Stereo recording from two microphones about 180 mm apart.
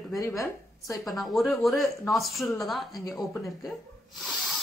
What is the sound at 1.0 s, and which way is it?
A woman's voice, centre (ahead or behind).